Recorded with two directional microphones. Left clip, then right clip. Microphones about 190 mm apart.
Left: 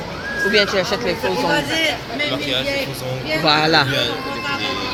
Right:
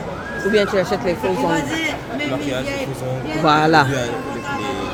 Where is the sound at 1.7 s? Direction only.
70° right (ahead or behind).